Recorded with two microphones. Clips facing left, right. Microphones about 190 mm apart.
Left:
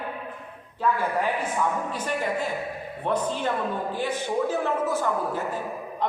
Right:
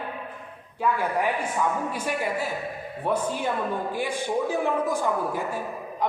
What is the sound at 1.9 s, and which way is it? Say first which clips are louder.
A man's voice: even; 10° right (ahead or behind).